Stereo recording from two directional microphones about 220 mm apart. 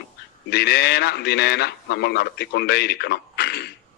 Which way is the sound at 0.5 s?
45° left (ahead or behind).